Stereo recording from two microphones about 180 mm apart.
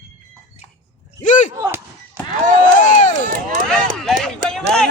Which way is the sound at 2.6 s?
45° left (ahead or behind).